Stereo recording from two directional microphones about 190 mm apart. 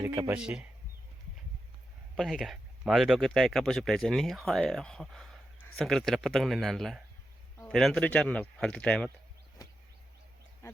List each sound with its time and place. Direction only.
0.0 s speech: 15° right (ahead or behind)
2.1 s speech: centre (ahead or behind)